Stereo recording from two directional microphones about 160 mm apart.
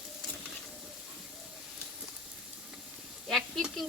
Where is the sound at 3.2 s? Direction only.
Centre (ahead or behind).